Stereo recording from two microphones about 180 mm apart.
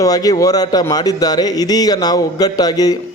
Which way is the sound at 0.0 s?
20° left (ahead or behind).